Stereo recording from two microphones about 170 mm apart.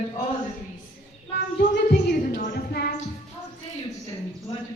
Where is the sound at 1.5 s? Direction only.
70° left (ahead or behind).